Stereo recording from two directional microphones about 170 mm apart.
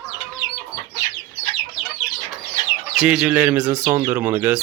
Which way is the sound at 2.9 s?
5° right (ahead or behind).